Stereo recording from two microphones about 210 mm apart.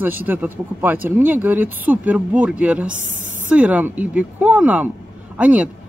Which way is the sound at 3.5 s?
5° right (ahead or behind).